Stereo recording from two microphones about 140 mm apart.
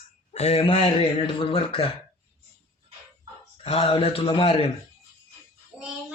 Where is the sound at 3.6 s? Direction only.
45° left (ahead or behind).